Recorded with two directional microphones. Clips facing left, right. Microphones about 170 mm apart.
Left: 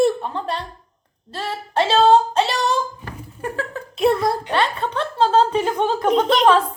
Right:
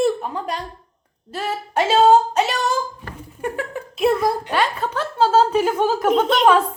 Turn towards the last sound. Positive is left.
turn(degrees=-5)  # may be behind; listen again after turning